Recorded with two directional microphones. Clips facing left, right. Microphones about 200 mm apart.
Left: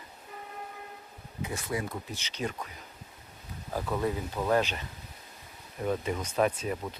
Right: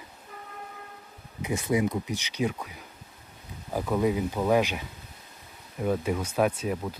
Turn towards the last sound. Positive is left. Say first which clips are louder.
# right 3 dB
turn(degrees=-5)  # may be behind; listen again after turning